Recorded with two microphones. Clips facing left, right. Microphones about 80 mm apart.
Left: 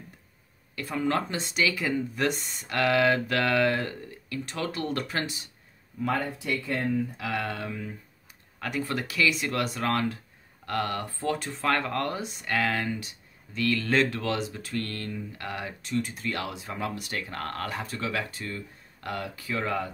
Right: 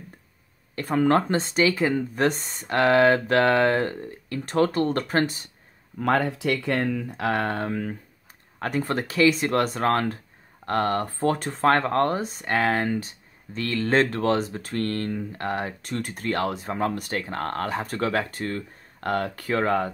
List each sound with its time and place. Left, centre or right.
0.7 s speech: right
5.9 s speech: right
7.2 s speech: right
17.8 s speech: right